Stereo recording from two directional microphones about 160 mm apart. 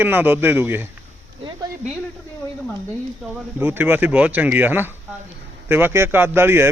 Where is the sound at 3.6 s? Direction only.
10° right (ahead or behind).